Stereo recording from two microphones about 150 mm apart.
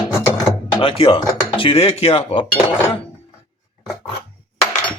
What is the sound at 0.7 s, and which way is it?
Music, 40° left (ahead or behind).